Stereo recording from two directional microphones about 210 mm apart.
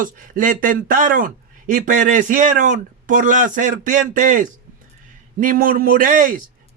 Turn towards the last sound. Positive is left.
turn(degrees=-40)  # may be behind; listen again after turning